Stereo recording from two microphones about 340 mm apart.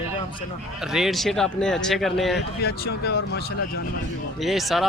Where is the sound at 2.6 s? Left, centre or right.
Left.